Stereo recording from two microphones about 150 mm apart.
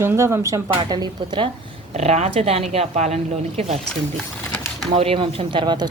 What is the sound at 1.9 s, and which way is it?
Speech, 45° right (ahead or behind).